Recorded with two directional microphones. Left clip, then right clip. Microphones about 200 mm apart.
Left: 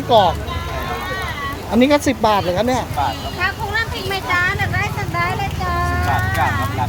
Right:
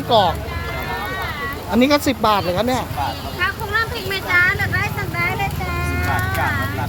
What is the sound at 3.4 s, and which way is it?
Vehicle, 50° left (ahead or behind).